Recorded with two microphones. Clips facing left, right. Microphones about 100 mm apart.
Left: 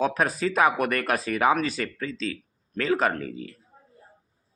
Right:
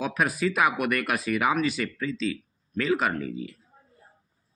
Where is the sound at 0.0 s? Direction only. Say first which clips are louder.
Left 2 dB; 35° left (ahead or behind).